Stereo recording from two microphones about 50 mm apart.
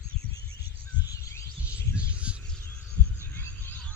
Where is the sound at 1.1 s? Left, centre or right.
Left.